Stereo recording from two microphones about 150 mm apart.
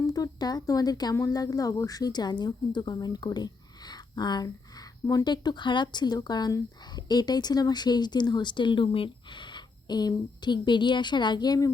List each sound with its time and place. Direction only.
0.1 s speech: 25° left (ahead or behind)